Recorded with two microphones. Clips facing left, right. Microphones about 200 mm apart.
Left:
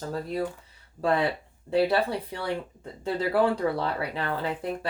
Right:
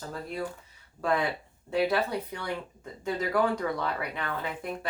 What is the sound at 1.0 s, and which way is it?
Speech, 30° left (ahead or behind).